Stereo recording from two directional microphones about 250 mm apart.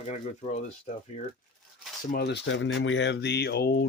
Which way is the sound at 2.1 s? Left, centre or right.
Left.